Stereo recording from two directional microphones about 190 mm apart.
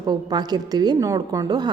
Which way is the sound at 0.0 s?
20° right (ahead or behind).